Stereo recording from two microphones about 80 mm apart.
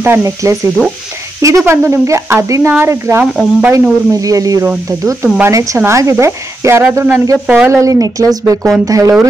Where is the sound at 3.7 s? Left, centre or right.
Right.